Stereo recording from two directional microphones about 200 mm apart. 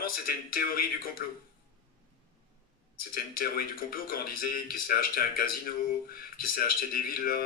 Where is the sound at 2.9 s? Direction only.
50° left (ahead or behind).